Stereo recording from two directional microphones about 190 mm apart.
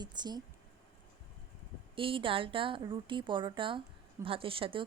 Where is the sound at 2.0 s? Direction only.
25° right (ahead or behind).